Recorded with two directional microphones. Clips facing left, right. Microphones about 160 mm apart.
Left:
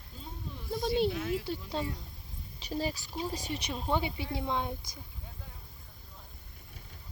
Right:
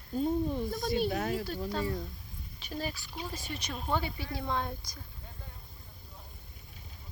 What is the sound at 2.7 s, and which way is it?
Speech, 30° left (ahead or behind).